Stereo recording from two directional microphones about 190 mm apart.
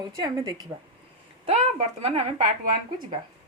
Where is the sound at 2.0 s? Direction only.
30° right (ahead or behind).